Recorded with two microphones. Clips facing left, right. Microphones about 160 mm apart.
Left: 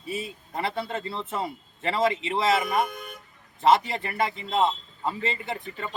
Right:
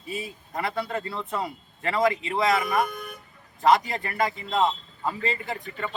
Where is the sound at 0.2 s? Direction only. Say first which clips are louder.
Right 2 dB; 25° left (ahead or behind).